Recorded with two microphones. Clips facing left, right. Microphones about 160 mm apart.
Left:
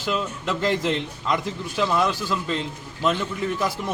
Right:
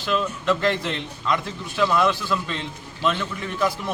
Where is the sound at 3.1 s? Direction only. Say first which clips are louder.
Left 2 dB; 15° left (ahead or behind).